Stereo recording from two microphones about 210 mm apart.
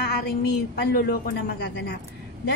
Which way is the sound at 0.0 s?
50° left (ahead or behind).